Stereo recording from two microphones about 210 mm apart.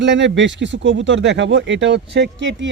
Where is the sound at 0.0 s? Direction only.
60° right (ahead or behind).